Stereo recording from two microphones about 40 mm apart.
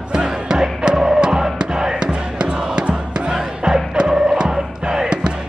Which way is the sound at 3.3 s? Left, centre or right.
Centre.